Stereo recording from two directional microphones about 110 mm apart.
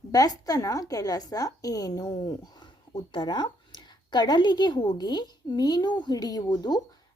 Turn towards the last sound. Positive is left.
turn(degrees=40)  # may be behind; listen again after turning